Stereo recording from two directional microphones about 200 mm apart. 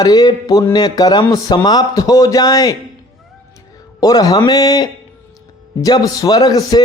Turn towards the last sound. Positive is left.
turn(degrees=20)  # may be behind; listen again after turning